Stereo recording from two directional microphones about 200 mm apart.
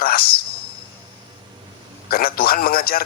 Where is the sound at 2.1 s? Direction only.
50° left (ahead or behind).